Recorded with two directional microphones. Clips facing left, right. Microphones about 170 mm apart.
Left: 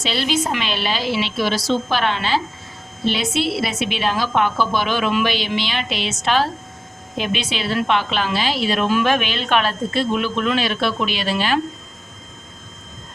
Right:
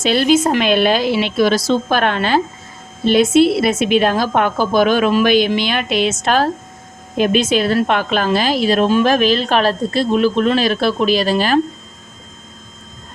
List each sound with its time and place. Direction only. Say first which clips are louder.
0.0 s a woman's voice: right 8 dB; 50° right (ahead or behind)